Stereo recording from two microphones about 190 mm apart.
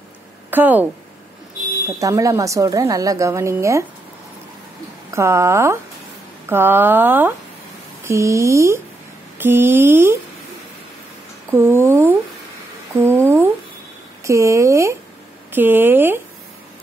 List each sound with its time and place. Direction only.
0.5 s speech: 10° right (ahead or behind)
2.0 s speech: 15° right (ahead or behind)
5.1 s speech: 15° right (ahead or behind)
11.5 s speech: 15° right (ahead or behind)
12.9 s a sound: 10° right (ahead or behind)
14.2 s speech: 15° right (ahead or behind)